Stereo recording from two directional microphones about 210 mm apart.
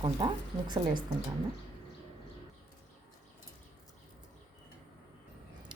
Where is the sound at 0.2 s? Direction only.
20° right (ahead or behind).